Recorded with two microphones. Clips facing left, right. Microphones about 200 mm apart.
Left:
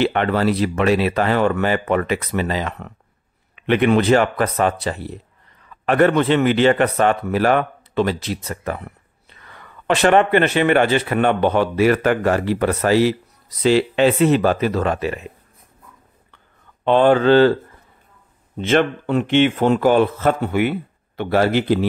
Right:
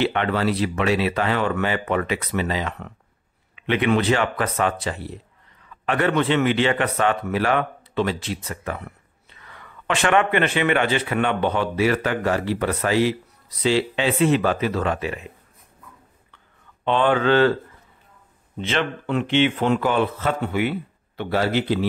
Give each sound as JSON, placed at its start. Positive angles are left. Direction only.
{"t": 0.0, "sound": "a man's voice", "side_deg": 45}
{"t": 16.8, "sound": "a man's voice", "side_deg": 40}
{"t": 18.6, "sound": "speech", "side_deg": 45}